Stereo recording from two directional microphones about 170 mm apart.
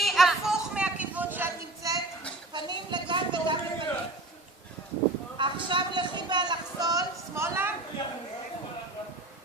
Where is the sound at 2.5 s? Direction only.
25° right (ahead or behind).